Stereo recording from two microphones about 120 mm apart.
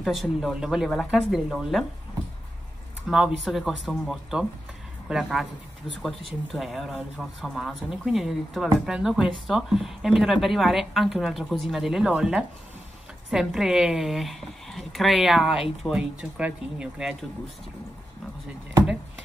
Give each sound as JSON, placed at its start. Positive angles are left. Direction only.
{"t": 0.0, "sound": "speech", "side_deg": 0}
{"t": 3.1, "sound": "speech", "side_deg": -5}
{"t": 6.5, "sound": "speech", "side_deg": 0}